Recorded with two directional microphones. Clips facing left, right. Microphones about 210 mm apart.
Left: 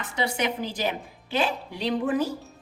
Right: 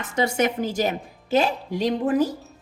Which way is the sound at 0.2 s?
45° right (ahead or behind).